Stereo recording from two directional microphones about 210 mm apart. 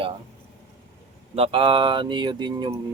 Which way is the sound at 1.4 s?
25° right (ahead or behind).